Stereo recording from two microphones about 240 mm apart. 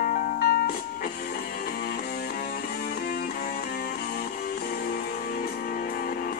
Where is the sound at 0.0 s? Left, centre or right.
Left.